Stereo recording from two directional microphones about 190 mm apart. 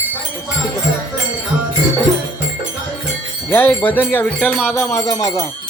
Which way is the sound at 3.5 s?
10° left (ahead or behind).